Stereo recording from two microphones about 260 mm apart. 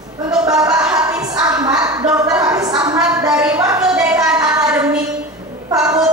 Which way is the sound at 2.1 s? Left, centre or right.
Centre.